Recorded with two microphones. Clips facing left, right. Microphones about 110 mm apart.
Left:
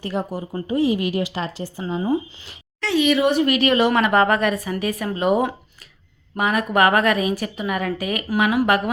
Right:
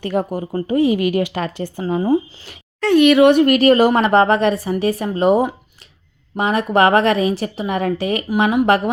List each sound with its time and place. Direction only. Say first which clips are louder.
0.0 s speech: right 5 dB; 60° right (ahead or behind)
3.6 s a woman's voice: right 5 dB; 40° right (ahead or behind); by 8.6 s 20° right (ahead or behind)